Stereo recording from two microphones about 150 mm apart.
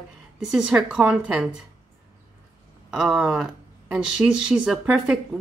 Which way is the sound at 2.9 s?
Centre (ahead or behind).